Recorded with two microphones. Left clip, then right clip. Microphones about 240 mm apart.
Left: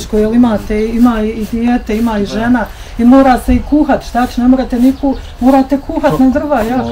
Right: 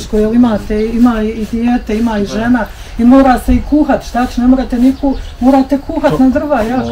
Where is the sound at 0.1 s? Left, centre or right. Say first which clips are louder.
Even; left.